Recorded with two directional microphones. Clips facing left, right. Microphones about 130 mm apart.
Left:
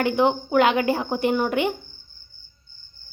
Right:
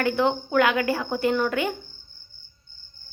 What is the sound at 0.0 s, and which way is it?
A woman's voice, 20° left (ahead or behind).